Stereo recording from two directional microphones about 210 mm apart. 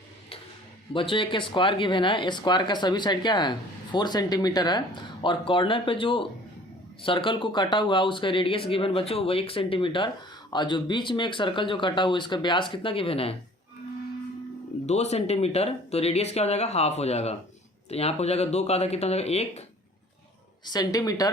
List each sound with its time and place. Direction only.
0.9 s speech: 25° left (ahead or behind)
14.8 s speech: 30° left (ahead or behind)
20.7 s speech: 20° left (ahead or behind)